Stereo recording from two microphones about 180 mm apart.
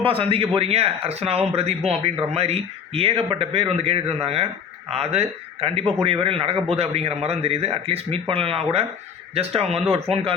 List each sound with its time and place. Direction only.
0.0 s speech: 30° right (ahead or behind)